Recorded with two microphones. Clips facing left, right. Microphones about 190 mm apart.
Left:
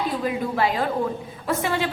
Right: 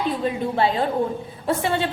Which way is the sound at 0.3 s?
30° right (ahead or behind).